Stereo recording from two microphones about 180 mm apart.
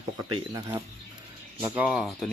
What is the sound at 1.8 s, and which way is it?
Speech, 5° right (ahead or behind).